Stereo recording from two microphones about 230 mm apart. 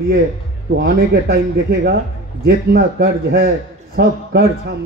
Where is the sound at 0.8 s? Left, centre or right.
Right.